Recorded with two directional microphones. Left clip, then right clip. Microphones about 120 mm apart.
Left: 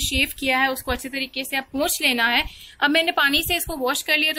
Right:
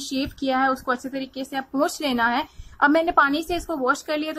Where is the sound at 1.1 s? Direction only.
75° right (ahead or behind).